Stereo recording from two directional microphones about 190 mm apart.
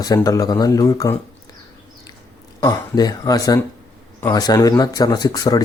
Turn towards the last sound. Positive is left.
turn(degrees=20)  # may be behind; listen again after turning